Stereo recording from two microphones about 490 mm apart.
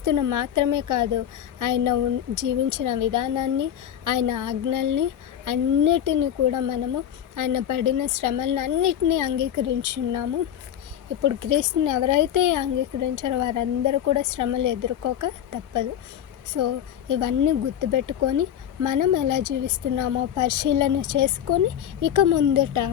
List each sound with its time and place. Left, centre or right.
0.0 s a woman's voice: right
17.1 s a woman's voice: right